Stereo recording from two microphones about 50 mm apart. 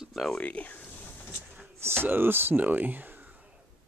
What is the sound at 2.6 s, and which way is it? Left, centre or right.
Speech, right.